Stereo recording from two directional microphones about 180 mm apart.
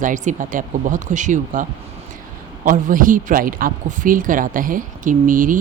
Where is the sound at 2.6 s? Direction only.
50° right (ahead or behind).